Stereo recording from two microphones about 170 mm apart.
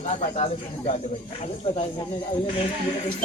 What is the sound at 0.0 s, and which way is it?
Speech, 40° left (ahead or behind).